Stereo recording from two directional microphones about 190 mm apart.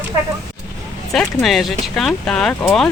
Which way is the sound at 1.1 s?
Centre (ahead or behind).